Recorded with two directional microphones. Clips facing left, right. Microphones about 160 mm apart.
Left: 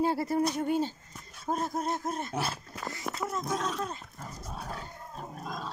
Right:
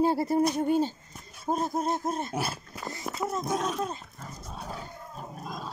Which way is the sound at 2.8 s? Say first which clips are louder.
Right 2 dB; 30° right (ahead or behind).